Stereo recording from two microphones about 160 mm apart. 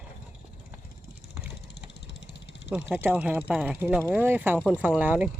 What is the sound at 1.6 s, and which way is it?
Vehicle, 90° left.